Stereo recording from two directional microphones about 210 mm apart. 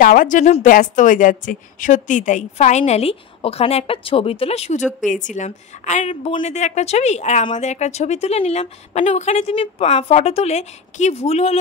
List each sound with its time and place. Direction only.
0.0 s a woman's voice: 40° left (ahead or behind)